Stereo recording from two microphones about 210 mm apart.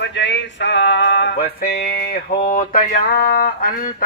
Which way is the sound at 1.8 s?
45° left (ahead or behind).